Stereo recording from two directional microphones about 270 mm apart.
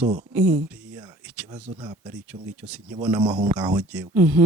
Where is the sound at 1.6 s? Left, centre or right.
Centre.